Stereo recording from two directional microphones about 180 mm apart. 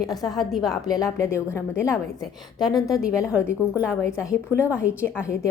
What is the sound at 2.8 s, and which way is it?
A woman's voice, centre (ahead or behind).